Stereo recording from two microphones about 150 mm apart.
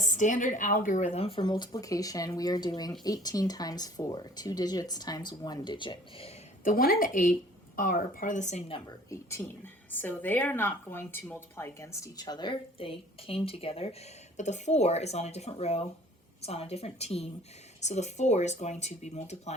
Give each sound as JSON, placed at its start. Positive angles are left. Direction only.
{"t": 0.0, "sound": "a woman's voice", "side_deg": 55}
{"t": 6.7, "sound": "a woman's voice", "side_deg": 80}
{"t": 9.0, "sound": "a woman's voice", "side_deg": 20}
{"t": 14.3, "sound": "speech", "side_deg": 50}